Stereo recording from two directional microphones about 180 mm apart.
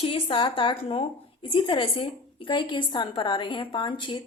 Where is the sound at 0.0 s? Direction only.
30° left (ahead or behind).